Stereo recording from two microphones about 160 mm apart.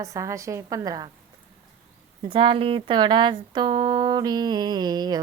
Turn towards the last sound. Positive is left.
turn(degrees=-25)  # may be behind; listen again after turning